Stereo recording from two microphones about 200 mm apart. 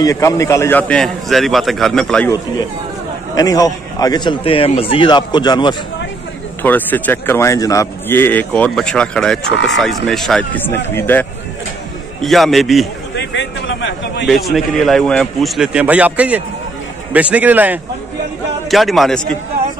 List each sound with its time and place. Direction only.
0.0 s a man's voice: 15° left (ahead or behind)
3.3 s a man's voice: 15° left (ahead or behind)
6.6 s a man's voice: 10° left (ahead or behind)
13.1 s a sound: 65° left (ahead or behind)
14.2 s a man's voice: centre (ahead or behind)